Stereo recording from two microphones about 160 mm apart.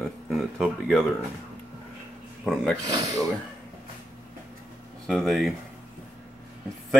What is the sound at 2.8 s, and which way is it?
Speech, 25° right (ahead or behind).